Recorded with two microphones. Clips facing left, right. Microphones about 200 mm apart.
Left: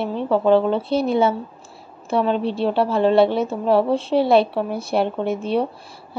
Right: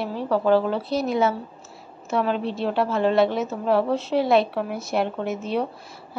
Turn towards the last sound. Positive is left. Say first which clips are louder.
# left 4 dB
turn(degrees=30)  # may be behind; listen again after turning